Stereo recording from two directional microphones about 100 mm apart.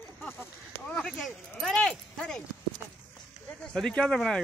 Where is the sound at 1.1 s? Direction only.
Centre (ahead or behind).